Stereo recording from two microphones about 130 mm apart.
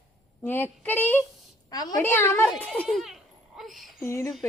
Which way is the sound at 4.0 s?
20° left (ahead or behind).